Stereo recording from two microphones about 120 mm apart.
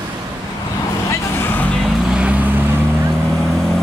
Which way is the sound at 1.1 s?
15° left (ahead or behind).